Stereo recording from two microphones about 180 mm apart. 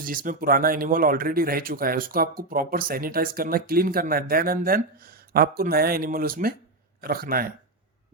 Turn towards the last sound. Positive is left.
turn(degrees=-55)  # may be behind; listen again after turning